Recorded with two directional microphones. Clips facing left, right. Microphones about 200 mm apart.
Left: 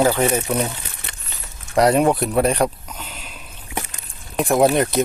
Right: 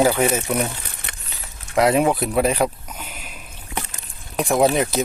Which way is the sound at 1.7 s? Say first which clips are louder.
Left 2 dB; centre (ahead or behind).